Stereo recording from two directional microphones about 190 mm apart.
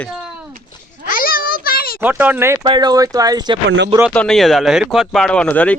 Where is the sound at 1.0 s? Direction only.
50° left (ahead or behind).